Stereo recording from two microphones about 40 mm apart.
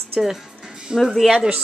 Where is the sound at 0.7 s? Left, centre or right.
Centre.